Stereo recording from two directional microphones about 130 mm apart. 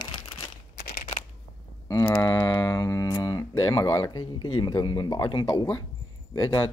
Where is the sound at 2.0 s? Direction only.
15° left (ahead or behind).